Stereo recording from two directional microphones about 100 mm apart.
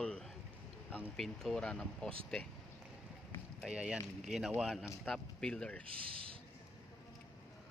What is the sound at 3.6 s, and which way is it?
Speech, 10° right (ahead or behind).